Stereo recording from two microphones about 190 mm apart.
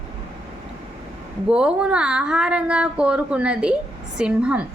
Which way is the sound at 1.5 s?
5° right (ahead or behind).